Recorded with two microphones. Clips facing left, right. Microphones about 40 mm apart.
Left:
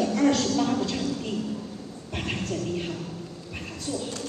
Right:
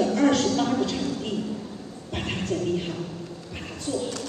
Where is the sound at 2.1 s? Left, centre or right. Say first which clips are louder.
Right 2 dB; right.